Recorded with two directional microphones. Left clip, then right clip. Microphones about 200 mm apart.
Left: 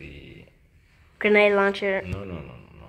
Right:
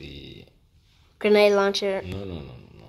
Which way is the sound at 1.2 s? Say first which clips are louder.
Even; 10° right (ahead or behind).